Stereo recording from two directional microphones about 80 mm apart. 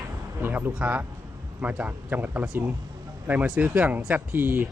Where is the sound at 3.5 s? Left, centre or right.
Centre.